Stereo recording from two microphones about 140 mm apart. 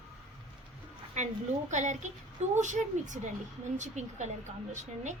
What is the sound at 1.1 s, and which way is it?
Speech, 60° right (ahead or behind).